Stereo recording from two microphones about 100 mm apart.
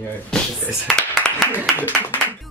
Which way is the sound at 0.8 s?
5° left (ahead or behind).